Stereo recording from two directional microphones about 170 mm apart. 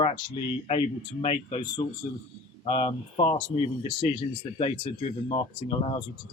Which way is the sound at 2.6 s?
30° left (ahead or behind).